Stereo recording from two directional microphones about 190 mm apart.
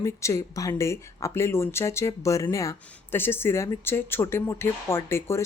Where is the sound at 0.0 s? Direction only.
15° left (ahead or behind).